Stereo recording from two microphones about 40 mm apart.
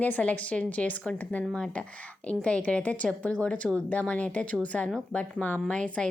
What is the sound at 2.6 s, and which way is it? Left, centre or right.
A woman's voice, left.